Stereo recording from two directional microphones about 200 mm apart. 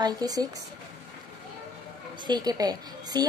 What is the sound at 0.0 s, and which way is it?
Speech, 20° right (ahead or behind).